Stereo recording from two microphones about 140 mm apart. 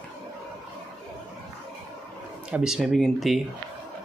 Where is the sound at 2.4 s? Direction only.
5° right (ahead or behind).